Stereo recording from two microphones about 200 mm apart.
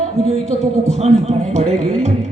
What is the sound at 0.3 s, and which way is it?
Speech, 35° right (ahead or behind).